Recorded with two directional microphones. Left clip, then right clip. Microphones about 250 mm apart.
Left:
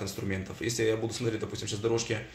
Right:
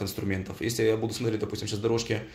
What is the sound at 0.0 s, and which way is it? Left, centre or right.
Speech, right.